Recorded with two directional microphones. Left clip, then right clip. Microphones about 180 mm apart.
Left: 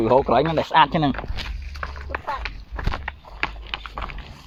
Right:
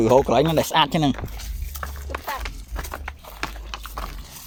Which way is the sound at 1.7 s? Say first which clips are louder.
Left 1 dB; 20° right (ahead or behind).